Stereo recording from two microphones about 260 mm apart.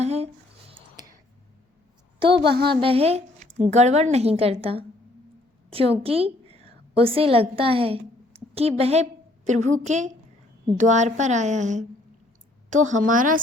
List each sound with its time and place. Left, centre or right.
0.0 s a sound: right
2.3 s a woman's voice: right
2.6 s a woman's voice: right